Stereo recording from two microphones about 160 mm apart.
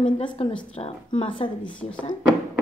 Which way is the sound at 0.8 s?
35° left (ahead or behind).